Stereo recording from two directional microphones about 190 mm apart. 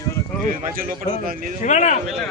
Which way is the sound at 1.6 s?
40° left (ahead or behind).